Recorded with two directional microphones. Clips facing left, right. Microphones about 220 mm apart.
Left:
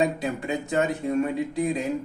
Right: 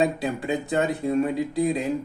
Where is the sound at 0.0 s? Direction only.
35° right (ahead or behind).